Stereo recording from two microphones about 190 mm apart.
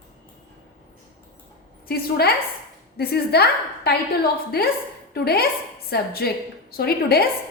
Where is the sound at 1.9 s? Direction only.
55° left (ahead or behind).